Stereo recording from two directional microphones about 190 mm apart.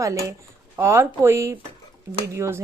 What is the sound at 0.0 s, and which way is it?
Speech, 15° right (ahead or behind).